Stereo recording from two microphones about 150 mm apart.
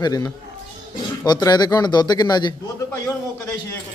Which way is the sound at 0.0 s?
25° left (ahead or behind).